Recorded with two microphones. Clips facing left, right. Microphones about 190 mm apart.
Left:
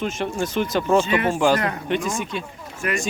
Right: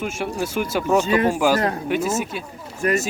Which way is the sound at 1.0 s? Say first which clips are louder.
Right 3 dB; 40° right (ahead or behind).